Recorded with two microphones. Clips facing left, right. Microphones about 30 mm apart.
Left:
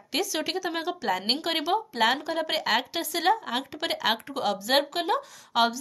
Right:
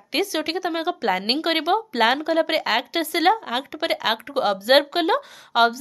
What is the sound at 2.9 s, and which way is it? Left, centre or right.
Speech, right.